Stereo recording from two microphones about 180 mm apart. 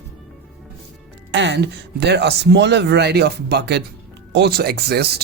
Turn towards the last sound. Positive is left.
turn(degrees=-65)  # may be behind; listen again after turning